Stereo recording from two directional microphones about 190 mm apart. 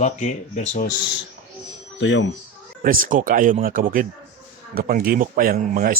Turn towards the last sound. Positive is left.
turn(degrees=-45)  # may be behind; listen again after turning